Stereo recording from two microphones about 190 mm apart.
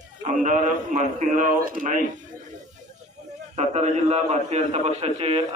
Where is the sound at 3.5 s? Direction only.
35° right (ahead or behind).